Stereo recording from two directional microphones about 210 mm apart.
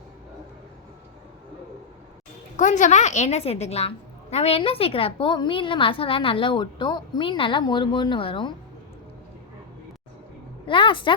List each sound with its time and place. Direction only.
2.6 s a woman's voice: 35° left (ahead or behind)
10.7 s a woman's voice: 25° left (ahead or behind)